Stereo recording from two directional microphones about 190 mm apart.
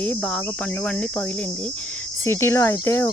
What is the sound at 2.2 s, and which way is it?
Speech, 15° left (ahead or behind).